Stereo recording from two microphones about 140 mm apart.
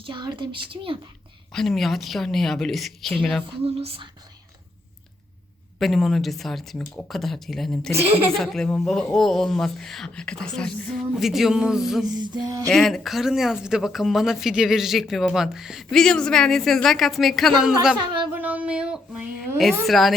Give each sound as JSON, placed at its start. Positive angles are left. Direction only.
{"t": 0.0, "sound": "a woman's voice", "side_deg": -35}
{"t": 1.5, "sound": "speech", "side_deg": 0}
{"t": 3.8, "sound": "speech", "side_deg": -40}
{"t": 5.8, "sound": "speech", "side_deg": 0}
{"t": 7.9, "sound": "a woman's voice", "side_deg": -15}
{"t": 8.3, "sound": "speech", "side_deg": 5}
{"t": 12.1, "sound": "a sound", "side_deg": -30}
{"t": 12.6, "sound": "speech", "side_deg": 0}
{"t": 17.9, "sound": "a woman's voice", "side_deg": -35}
{"t": 18.3, "sound": "a sound", "side_deg": -10}
{"t": 19.5, "sound": "speech", "side_deg": 0}